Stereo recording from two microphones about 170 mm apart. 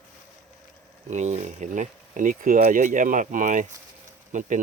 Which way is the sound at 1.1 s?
45° right (ahead or behind).